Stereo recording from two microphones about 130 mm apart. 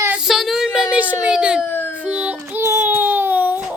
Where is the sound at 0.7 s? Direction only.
10° right (ahead or behind).